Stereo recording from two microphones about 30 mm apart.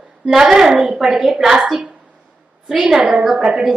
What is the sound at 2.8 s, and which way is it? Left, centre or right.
Speech, centre.